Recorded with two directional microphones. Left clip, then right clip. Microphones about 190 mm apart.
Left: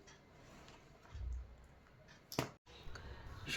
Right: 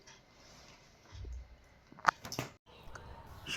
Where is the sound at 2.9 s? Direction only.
20° left (ahead or behind).